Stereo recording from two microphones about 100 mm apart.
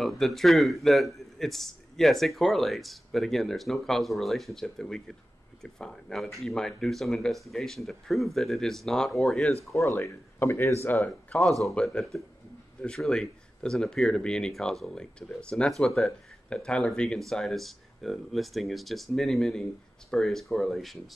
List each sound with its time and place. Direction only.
0.0 s speech: centre (ahead or behind)
9.7 s speech: 30° left (ahead or behind)
11.2 s speech: 10° left (ahead or behind)